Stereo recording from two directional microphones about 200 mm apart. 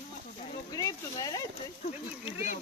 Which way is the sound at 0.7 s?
20° left (ahead or behind).